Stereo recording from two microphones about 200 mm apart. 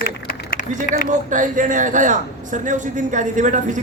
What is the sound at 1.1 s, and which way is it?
A man's voice, 40° right (ahead or behind).